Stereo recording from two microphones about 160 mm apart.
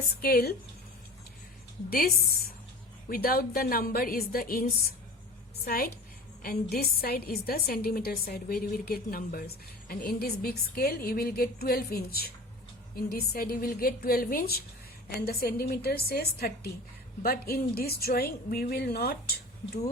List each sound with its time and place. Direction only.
0.2 s a woman's voice: 75° left (ahead or behind)
1.9 s a woman's voice: 70° left (ahead or behind)